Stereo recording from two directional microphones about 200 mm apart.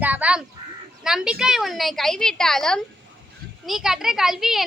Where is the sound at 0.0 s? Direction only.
5° right (ahead or behind).